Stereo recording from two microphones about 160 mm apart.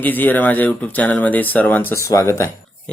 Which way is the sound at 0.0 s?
10° left (ahead or behind).